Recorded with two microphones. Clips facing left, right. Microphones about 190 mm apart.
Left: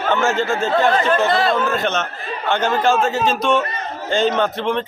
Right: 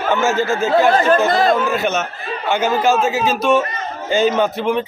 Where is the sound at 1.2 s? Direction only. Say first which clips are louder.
Right 2 dB; 40° right (ahead or behind).